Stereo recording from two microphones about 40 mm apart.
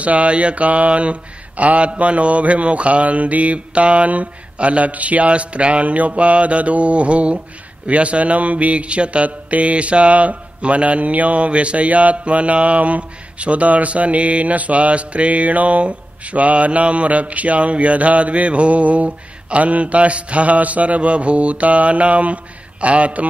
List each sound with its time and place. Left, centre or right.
0.0 s mantra: right